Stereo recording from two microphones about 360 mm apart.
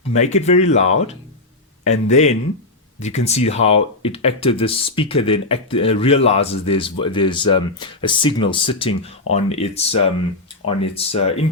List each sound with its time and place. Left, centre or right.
0.1 s speech: centre
2.0 s speech: centre